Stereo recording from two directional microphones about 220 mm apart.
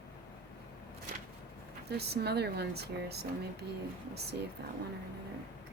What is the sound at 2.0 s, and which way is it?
Speech, 45° right (ahead or behind).